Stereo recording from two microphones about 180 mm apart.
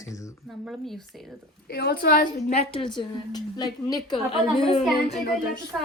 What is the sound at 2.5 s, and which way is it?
A woman's voice, 35° left (ahead or behind).